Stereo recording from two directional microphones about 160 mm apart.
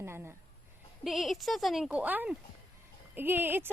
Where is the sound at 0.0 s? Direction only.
15° right (ahead or behind).